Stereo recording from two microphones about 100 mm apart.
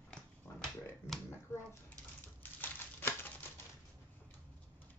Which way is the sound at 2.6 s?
20° left (ahead or behind).